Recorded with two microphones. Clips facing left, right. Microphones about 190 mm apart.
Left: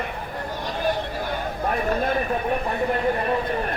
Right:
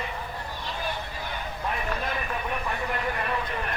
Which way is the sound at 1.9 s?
45° left (ahead or behind).